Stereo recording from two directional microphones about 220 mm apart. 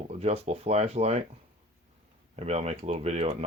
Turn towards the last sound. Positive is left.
turn(degrees=-30)  # may be behind; listen again after turning